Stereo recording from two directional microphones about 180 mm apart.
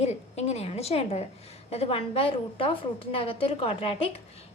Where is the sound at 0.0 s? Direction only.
40° left (ahead or behind).